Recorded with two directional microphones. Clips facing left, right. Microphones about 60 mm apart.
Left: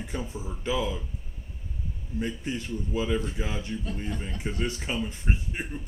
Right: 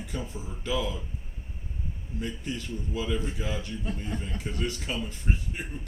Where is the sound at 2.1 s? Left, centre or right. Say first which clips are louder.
Left 3 dB; left.